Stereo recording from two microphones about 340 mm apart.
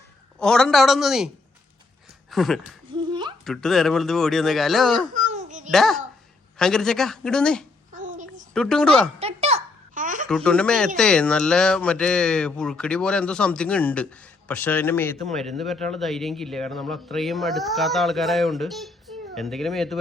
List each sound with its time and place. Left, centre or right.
0.3 s speech: centre
2.3 s speech: centre
2.9 s a sound: centre
3.4 s speech: centre
5.1 s a sound: right
5.7 s speech: centre
7.9 s a sound: right
8.5 s speech: centre
9.1 s babbling: centre
10.2 s speech: centre